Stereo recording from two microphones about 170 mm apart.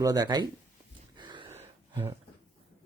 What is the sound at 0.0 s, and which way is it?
Speech, 20° right (ahead or behind).